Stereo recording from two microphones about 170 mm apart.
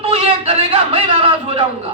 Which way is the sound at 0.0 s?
35° right (ahead or behind).